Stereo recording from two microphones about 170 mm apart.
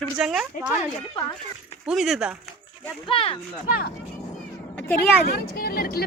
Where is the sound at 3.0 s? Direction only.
30° left (ahead or behind).